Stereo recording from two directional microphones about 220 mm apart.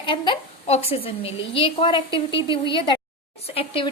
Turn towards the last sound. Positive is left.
turn(degrees=25)  # may be behind; listen again after turning